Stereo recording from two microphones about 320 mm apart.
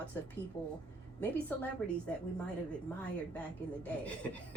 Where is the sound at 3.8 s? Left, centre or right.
Centre.